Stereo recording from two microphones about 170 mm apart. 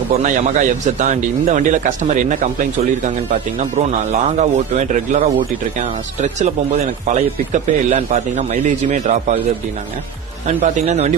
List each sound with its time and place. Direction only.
0.1 s a man's voice: 45° right (ahead or behind)
4.4 s a man's voice: 45° right (ahead or behind)
10.4 s a man's voice: 45° right (ahead or behind)